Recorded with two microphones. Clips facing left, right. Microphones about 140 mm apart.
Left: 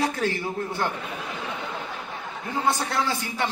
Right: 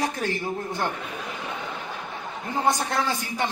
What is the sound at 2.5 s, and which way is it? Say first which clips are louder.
Speech: right 1 dB; 15° right (ahead or behind).